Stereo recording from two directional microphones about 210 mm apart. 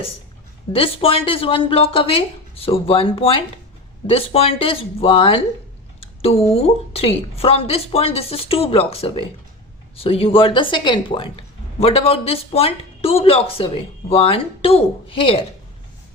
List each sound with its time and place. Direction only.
0.7 s speech: 25° left (ahead or behind)